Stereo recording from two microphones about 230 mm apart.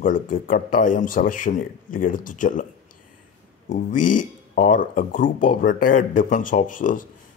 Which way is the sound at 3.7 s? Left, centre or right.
Left.